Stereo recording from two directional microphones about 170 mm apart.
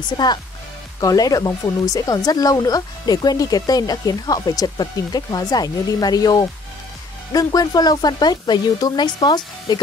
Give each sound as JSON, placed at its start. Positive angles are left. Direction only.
{"t": 0.2, "sound": "speech", "side_deg": 25}